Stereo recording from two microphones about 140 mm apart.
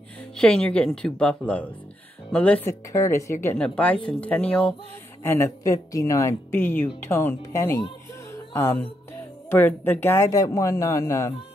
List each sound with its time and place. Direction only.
0.4 s speech: 5° left (ahead or behind)
2.9 s speech: 20° left (ahead or behind)
8.3 s a sound: 15° left (ahead or behind)
9.5 s speech: 15° left (ahead or behind)